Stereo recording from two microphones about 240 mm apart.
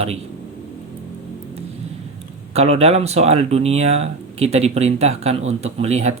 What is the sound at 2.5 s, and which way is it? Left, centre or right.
Speech, right.